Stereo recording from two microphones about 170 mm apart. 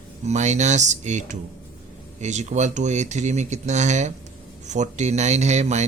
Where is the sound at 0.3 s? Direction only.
45° right (ahead or behind).